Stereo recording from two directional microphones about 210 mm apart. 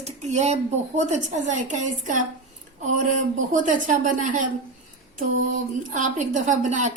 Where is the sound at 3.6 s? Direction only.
40° right (ahead or behind).